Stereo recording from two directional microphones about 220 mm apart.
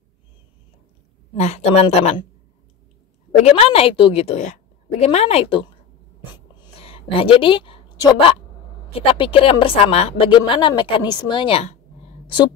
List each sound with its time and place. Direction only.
1.3 s a woman's voice: 30° left (ahead or behind)
3.4 s a woman's voice: 25° left (ahead or behind)
6.3 s a sound: 20° left (ahead or behind)
9.2 s a woman's voice: 25° left (ahead or behind)